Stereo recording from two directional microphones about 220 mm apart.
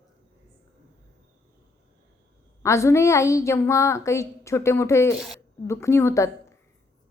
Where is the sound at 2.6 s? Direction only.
15° left (ahead or behind).